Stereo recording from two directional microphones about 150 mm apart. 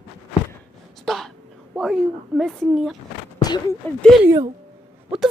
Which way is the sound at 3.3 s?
30° left (ahead or behind).